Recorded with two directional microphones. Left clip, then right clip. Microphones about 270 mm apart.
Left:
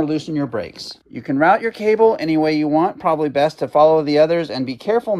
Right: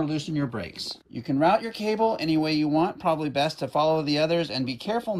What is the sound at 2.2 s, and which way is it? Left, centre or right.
Speech, centre.